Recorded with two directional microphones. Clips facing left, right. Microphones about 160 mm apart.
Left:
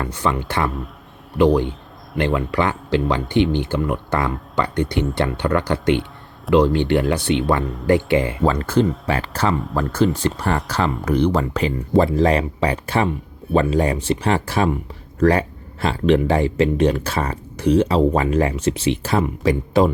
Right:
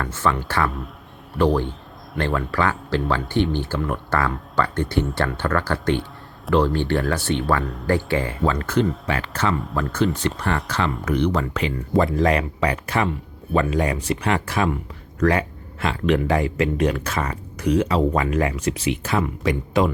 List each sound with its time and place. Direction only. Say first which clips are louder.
0.0 s speech: left 1 dB; 15° left (ahead or behind)
4.5 s speech: left 1 dB; 15° left (ahead or behind)
8.4 s speech: left 1 dB; 30° left (ahead or behind)